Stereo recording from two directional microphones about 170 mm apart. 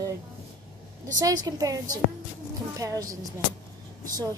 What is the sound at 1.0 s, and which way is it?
A woman's voice, 20° right (ahead or behind).